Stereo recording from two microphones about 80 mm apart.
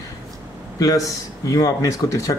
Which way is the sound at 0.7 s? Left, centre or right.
Left.